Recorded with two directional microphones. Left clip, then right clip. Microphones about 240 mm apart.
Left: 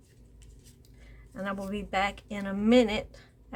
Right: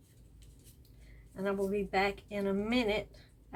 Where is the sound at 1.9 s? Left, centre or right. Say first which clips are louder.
Left 6 dB; left.